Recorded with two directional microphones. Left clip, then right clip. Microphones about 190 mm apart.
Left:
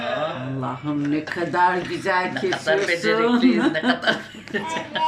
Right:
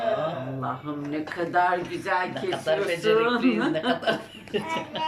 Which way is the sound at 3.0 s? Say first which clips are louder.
Left 2 dB; 35° left (ahead or behind).